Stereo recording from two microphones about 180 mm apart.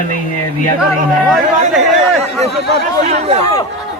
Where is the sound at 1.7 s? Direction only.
Centre (ahead or behind).